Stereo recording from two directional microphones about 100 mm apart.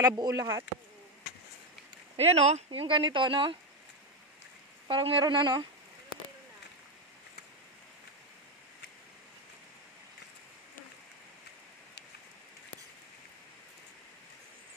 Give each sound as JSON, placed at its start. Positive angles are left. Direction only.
{"t": 0.0, "sound": "speech", "side_deg": -40}
{"t": 2.1, "sound": "speech", "side_deg": -90}
{"t": 4.8, "sound": "speech", "side_deg": -60}
{"t": 5.2, "sound": "speech", "side_deg": -50}